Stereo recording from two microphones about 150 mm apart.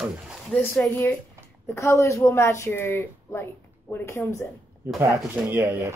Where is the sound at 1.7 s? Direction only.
20° left (ahead or behind).